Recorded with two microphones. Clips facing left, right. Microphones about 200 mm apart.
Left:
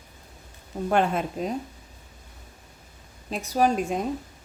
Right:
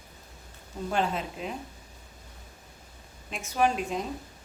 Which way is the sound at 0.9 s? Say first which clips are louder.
Left 6 dB; 55° left (ahead or behind).